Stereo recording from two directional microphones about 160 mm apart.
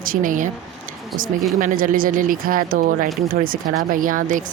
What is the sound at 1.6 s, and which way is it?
Speech, 60° right (ahead or behind).